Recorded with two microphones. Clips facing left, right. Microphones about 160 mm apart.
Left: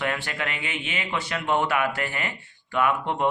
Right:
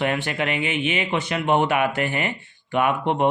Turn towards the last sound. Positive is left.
turn(degrees=-20)  # may be behind; listen again after turning